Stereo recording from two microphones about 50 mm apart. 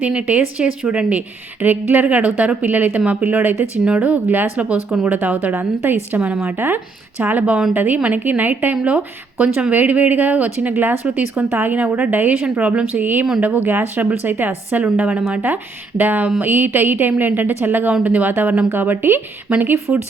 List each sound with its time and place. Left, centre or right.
0.0 s a woman's voice: right
1.6 s speech: right
3.8 s a woman's voice: right
7.2 s a woman's voice: right
14.9 s a woman's voice: right
16.0 s speech: right